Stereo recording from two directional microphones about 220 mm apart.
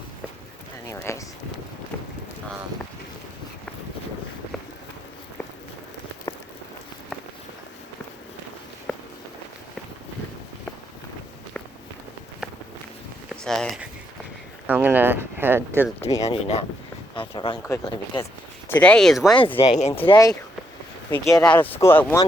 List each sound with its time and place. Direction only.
0.9 s speech: 15° left (ahead or behind)
8.9 s walk: 5° left (ahead or behind)
13.4 s speech: centre (ahead or behind)
16.2 s speech: 30° left (ahead or behind)
18.7 s speech: 5° left (ahead or behind)
19.5 s speech: 30° left (ahead or behind)
20.1 s speech: 15° left (ahead or behind)
21.1 s speech: 5° left (ahead or behind)